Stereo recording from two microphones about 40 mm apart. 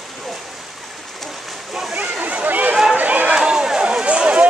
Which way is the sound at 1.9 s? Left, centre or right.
Right.